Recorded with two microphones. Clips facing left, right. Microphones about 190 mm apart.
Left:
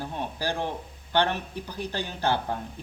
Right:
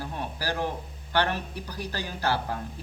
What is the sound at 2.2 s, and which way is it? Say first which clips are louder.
Speech: left 2 dB; 20° left (ahead or behind).